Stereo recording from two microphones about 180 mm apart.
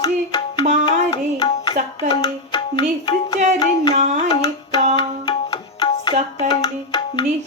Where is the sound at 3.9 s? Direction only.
40° right (ahead or behind).